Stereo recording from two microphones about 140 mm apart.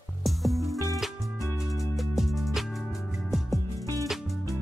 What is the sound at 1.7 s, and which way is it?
Music, centre (ahead or behind).